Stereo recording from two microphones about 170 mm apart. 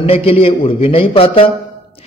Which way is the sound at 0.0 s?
35° left (ahead or behind).